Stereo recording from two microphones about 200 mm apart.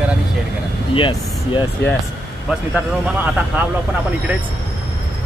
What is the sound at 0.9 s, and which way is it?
Speech, 25° left (ahead or behind).